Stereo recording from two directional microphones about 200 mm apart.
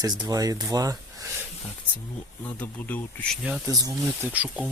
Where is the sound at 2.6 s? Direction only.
10° left (ahead or behind).